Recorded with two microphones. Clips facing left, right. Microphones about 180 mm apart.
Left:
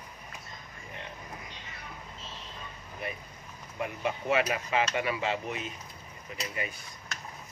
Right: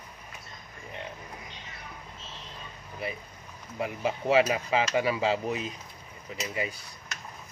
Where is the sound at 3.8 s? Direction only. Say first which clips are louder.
Right 2 dB; 30° right (ahead or behind).